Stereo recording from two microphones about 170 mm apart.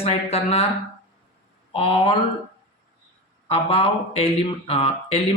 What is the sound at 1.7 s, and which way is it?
Speech, 35° left (ahead or behind).